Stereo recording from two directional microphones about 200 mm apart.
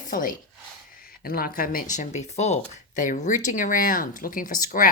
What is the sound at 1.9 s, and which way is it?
Speech, 35° left (ahead or behind).